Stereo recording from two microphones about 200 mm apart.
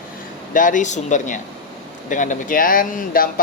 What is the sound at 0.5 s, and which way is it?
Speech, 40° left (ahead or behind).